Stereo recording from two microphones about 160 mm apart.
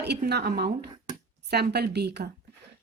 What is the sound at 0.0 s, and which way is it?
Speech, 90° right.